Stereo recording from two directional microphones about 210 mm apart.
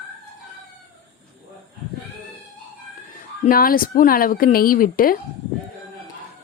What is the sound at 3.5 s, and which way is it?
Speech, 45° left (ahead or behind).